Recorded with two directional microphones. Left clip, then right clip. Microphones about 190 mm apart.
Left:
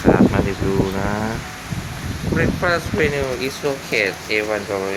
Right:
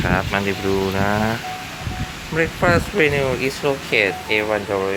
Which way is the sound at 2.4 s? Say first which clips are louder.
Right 2 dB; 20° right (ahead or behind).